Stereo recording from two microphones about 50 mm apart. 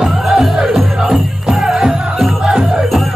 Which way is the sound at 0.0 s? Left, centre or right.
Centre.